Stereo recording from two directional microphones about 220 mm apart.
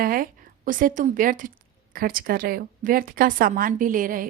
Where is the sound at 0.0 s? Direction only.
40° right (ahead or behind).